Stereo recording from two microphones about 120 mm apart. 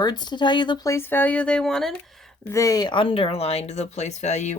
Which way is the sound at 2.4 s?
30° left (ahead or behind).